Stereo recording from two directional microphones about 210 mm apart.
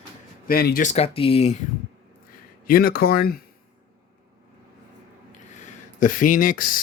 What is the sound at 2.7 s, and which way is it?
Speech, 45° left (ahead or behind).